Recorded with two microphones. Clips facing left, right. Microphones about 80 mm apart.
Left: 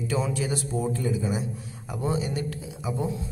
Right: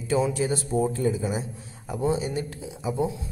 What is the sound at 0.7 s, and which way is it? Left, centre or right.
Speech, right.